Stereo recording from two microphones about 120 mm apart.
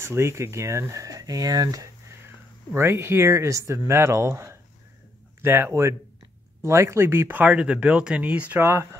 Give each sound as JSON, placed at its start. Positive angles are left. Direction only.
{"t": 0.0, "sound": "speech", "side_deg": -20}